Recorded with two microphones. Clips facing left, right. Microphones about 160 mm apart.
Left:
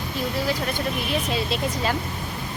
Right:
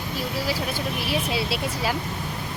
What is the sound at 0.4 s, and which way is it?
Speech, 5° right (ahead or behind).